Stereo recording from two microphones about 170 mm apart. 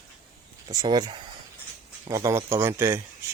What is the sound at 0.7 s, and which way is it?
Speech, 25° right (ahead or behind).